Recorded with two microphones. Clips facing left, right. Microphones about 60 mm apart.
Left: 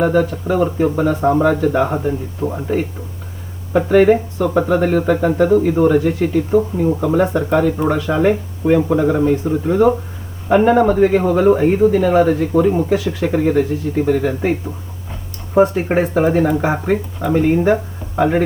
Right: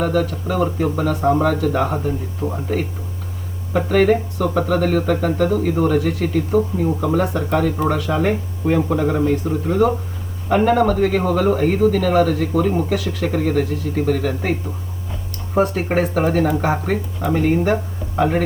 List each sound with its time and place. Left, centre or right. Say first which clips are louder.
0.0 s speech: left 4 dB; centre
15.5 s speech: left 4 dB; centre